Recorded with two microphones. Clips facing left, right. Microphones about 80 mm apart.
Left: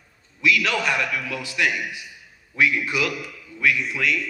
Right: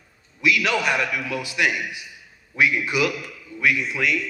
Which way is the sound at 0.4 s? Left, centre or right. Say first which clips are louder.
Right 1 dB; centre.